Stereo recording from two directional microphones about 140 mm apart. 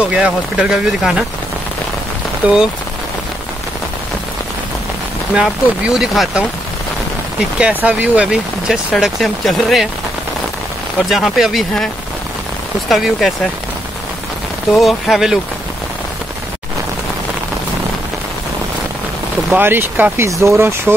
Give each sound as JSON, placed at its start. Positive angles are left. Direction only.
{"t": 0.0, "sound": "speech", "side_deg": -10}
{"t": 2.4, "sound": "speech", "side_deg": -5}
{"t": 5.3, "sound": "speech", "side_deg": -5}
{"t": 7.5, "sound": "speech", "side_deg": -10}
{"t": 11.0, "sound": "speech", "side_deg": 0}
{"t": 14.7, "sound": "speech", "side_deg": 0}
{"t": 19.5, "sound": "speech", "side_deg": -15}